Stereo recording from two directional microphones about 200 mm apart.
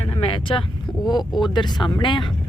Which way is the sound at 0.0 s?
30° left (ahead or behind).